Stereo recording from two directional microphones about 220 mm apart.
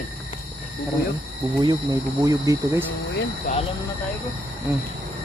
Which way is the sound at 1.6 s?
15° right (ahead or behind).